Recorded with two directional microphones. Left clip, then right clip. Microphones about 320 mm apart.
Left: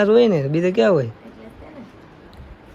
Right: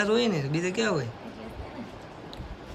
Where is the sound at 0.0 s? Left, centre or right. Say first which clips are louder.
Left 11 dB; centre.